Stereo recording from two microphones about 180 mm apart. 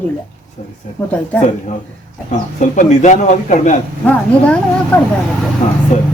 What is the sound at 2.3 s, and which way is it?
A man's voice, 45° left (ahead or behind).